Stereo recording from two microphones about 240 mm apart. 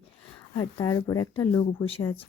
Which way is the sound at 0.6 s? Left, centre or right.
Centre.